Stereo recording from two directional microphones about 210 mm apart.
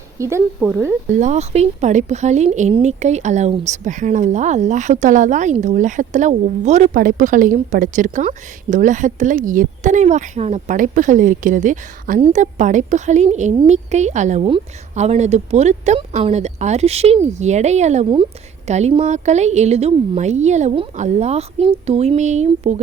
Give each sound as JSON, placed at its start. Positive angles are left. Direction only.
{"t": 0.2, "sound": "speech", "side_deg": -10}
{"t": 1.1, "sound": "speech", "side_deg": -35}